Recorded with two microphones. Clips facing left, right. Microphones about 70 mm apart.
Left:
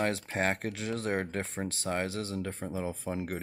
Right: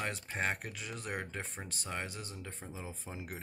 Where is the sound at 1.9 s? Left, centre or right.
Left.